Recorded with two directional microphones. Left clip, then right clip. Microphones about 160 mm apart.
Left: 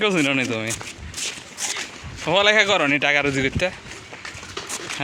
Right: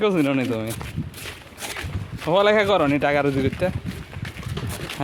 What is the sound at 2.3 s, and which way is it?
Speech, 20° right (ahead or behind).